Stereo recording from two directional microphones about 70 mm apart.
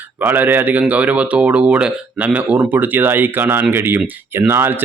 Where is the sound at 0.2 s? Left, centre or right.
Right.